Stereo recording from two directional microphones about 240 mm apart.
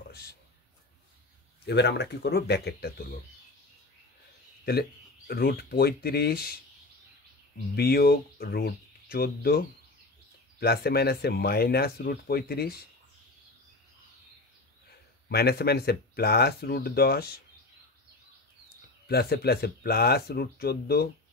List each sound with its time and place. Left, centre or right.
1.7 s speech: left
4.6 s speech: left
7.7 s speech: left
15.2 s speech: left
19.0 s speech: left